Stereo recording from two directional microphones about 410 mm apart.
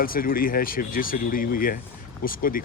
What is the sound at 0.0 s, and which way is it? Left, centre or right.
Speech, left.